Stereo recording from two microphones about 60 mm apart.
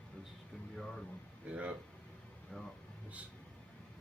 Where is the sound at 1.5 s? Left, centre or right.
Right.